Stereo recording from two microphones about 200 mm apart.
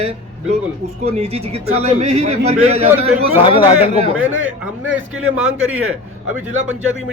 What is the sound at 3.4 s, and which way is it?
Speech, 25° left (ahead or behind).